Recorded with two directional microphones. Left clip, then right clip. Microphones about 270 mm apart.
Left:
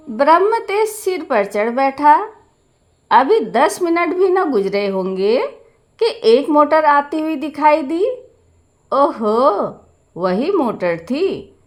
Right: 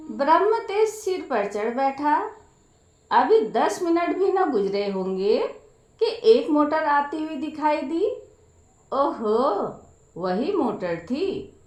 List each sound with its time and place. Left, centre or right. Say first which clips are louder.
0.2 s a woman's voice: left 7 dB; left